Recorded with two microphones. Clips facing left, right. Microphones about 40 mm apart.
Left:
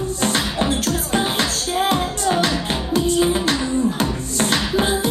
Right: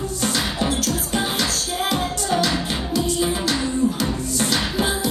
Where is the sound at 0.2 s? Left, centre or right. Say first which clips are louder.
Left 2 dB; left.